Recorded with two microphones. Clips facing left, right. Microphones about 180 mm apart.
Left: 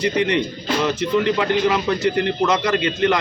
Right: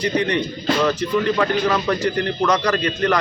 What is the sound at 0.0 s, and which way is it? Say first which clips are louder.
A man's voice: left 1 dB; 20° left (ahead or behind).